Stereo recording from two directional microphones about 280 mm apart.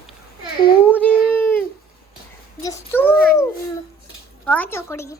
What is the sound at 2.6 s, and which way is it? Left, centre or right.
Speech, centre.